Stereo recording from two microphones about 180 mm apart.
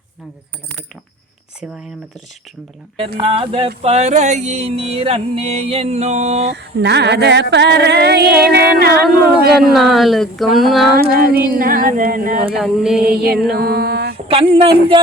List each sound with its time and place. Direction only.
3.2 s music: 30° right (ahead or behind)
6.5 s music: 70° right (ahead or behind)
9.6 s speech: centre (ahead or behind)
10.9 s a sound: 55° right (ahead or behind)
12.5 s speech: 5° right (ahead or behind)
13.0 s mantra: 55° right (ahead or behind)
14.3 s music: 30° right (ahead or behind)